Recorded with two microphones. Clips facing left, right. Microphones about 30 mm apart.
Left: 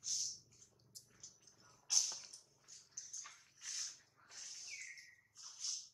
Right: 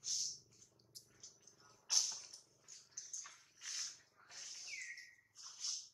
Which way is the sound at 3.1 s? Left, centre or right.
Centre.